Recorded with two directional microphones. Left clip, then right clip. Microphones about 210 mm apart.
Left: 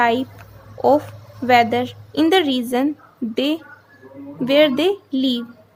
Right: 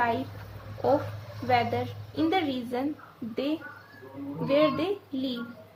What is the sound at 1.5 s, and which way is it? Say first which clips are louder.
Speech: left 11 dB; 50° left (ahead or behind).